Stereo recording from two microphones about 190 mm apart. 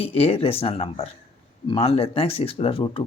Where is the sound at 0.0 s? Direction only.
30° left (ahead or behind).